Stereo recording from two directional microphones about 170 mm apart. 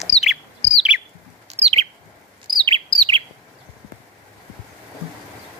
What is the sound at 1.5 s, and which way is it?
Bird, 40° right (ahead or behind).